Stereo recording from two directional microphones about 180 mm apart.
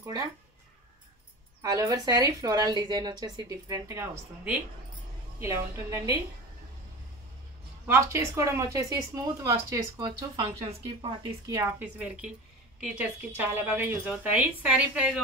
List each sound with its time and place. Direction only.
1.6 s a woman's voice: 20° right (ahead or behind)
7.8 s a woman's voice: 15° right (ahead or behind)
12.8 s a woman's voice: 5° right (ahead or behind)